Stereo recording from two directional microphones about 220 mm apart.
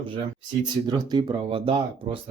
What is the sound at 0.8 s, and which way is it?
Speech, 20° right (ahead or behind).